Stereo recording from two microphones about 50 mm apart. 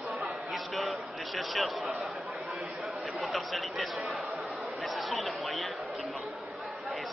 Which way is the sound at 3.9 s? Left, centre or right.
Centre.